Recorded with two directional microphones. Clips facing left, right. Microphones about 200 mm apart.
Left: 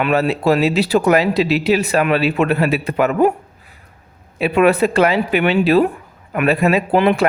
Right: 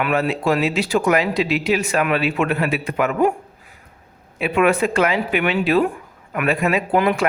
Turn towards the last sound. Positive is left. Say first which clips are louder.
# left 4 dB
turn(degrees=30)  # may be behind; listen again after turning